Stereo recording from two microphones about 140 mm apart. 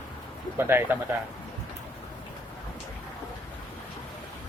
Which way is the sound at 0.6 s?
15° right (ahead or behind).